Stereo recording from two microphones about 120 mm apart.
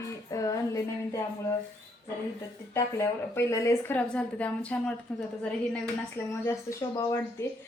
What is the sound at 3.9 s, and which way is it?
A woman's voice, 10° left (ahead or behind).